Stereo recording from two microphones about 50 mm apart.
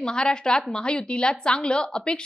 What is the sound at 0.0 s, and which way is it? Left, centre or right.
A woman's voice, centre.